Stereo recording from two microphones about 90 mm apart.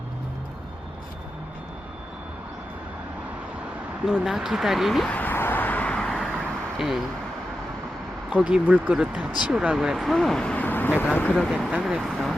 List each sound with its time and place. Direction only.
4.0 s speech: 5° right (ahead or behind)
5.0 s a sound: 20° left (ahead or behind)
6.7 s speech: centre (ahead or behind)
8.3 s speech: 10° right (ahead or behind); by 11.3 s 20° left (ahead or behind)
11.3 s speech: centre (ahead or behind)
11.7 s speech: 10° right (ahead or behind)